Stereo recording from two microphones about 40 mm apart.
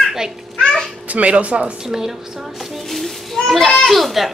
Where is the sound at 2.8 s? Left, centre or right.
Centre.